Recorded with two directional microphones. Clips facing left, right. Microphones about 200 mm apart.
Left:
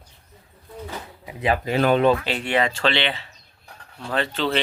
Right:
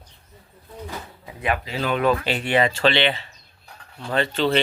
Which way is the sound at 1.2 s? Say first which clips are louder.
Left 3 dB; 20° left (ahead or behind).